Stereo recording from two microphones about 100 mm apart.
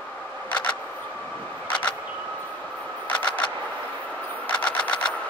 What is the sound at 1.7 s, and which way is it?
Vehicle, 10° left (ahead or behind).